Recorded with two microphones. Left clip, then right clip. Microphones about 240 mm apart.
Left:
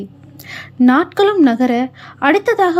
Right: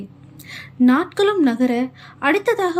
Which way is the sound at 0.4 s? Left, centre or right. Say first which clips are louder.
Left 4 dB; centre.